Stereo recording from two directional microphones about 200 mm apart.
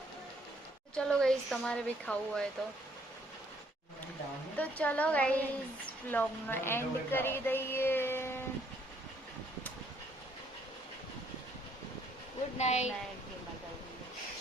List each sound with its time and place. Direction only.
0.9 s a woman's voice: 5° left (ahead or behind)
4.5 s a woman's voice: 5° left (ahead or behind)
12.5 s a woman's voice: 35° left (ahead or behind)